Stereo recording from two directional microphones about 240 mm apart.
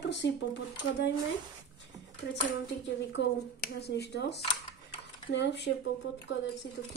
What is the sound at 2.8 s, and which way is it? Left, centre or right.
Speech, left.